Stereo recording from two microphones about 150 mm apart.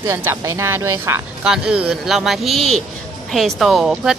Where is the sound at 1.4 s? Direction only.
5° right (ahead or behind).